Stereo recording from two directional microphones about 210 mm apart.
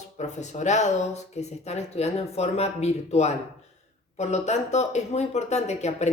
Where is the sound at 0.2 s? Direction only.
35° left (ahead or behind).